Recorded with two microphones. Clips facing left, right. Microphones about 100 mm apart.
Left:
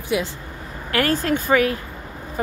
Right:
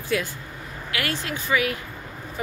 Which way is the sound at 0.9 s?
40° left (ahead or behind).